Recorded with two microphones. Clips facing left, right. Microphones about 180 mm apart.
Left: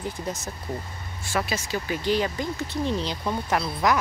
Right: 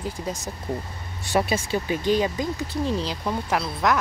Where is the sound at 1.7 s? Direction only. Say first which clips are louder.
Right 2 dB; 20° right (ahead or behind).